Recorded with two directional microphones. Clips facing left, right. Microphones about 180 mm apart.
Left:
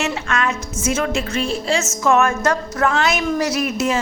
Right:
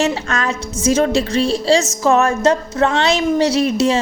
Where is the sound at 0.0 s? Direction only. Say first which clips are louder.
Right 3 dB; 35° right (ahead or behind).